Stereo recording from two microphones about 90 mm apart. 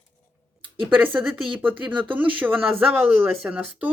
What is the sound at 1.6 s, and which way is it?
Speech, 20° right (ahead or behind).